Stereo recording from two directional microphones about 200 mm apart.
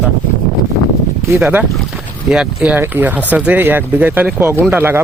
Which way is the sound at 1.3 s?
5° right (ahead or behind).